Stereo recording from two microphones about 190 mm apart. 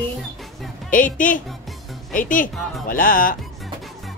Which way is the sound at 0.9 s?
45° left (ahead or behind).